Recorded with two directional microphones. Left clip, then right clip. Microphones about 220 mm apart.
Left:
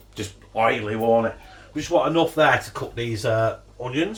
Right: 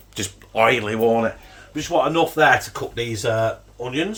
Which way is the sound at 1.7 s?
45° right (ahead or behind).